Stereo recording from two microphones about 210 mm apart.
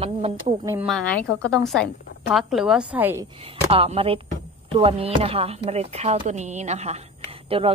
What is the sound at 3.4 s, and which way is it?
Speech, 25° right (ahead or behind).